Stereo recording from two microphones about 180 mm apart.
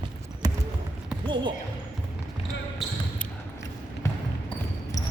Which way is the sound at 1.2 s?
25° right (ahead or behind).